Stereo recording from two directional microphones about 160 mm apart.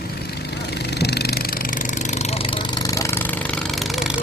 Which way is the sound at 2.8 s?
20° left (ahead or behind).